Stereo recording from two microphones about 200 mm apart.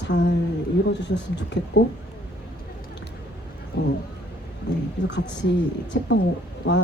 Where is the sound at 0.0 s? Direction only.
60° left (ahead or behind).